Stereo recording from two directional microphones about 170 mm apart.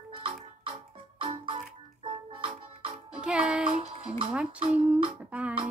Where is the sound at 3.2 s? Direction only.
5° right (ahead or behind).